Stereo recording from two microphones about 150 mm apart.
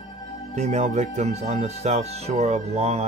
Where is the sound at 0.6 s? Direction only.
50° right (ahead or behind).